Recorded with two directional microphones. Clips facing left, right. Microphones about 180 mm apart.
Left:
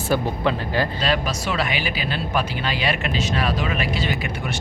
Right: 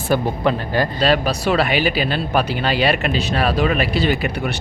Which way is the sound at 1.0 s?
65° right (ahead or behind).